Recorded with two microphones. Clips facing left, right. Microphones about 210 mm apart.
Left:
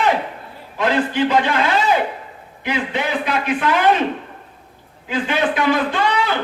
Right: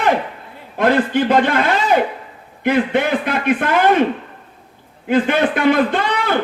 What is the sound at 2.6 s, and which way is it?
A man's voice, 55° right (ahead or behind).